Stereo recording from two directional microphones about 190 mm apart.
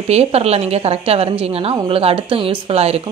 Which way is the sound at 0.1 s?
35° right (ahead or behind).